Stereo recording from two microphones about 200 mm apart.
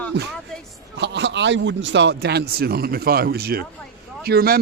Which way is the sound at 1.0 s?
60° right (ahead or behind).